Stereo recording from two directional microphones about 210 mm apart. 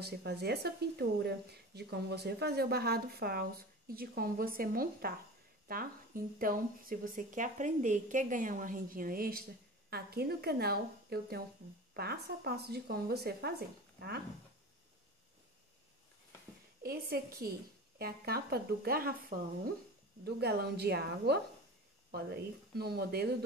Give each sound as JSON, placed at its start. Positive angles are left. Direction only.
{"t": 0.0, "sound": "a woman's voice", "side_deg": -50}
{"t": 16.8, "sound": "a woman's voice", "side_deg": -45}